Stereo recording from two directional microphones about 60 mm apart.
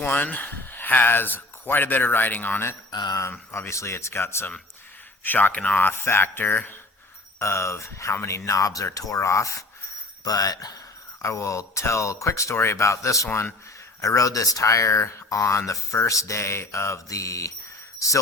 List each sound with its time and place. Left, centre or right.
0.0 s speech: left
3.5 s speech: left
5.2 s speech: left
5.8 s speech: left
7.3 s speech: left
8.4 s speech: left
10.2 s speech: left
11.2 s speech: left